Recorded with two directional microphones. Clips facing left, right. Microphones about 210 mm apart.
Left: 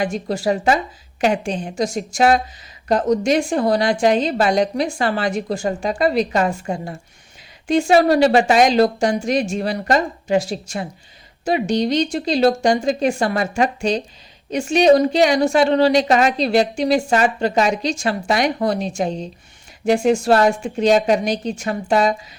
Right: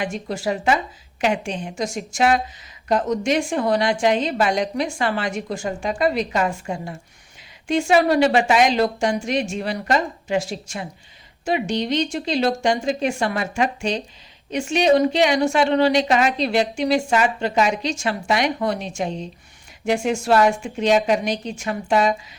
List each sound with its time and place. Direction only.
0.0 s a woman's voice: 35° left (ahead or behind)